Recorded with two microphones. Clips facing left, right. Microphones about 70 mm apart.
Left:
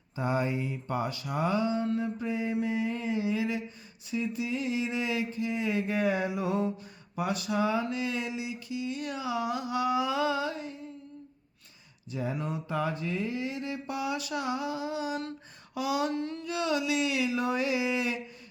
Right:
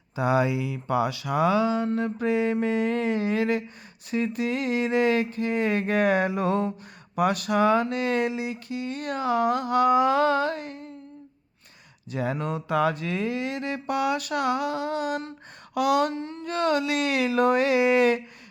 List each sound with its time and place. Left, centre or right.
0.2 s a sound: right
2.0 s mantra: right
7.2 s speech: right
12.1 s mantra: right
15.7 s speech: right
16.1 s carnatic music: right
16.4 s mantra: right